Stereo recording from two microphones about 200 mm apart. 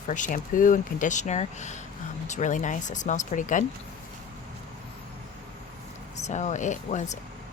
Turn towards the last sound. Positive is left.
turn(degrees=35)  # may be behind; listen again after turning